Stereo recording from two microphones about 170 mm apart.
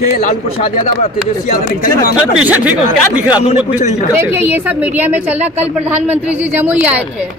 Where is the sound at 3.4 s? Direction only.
45° left (ahead or behind).